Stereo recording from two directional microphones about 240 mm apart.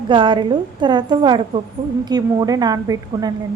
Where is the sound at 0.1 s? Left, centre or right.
Centre.